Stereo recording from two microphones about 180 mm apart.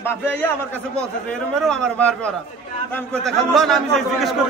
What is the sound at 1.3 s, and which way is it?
A man's voice, 5° left (ahead or behind).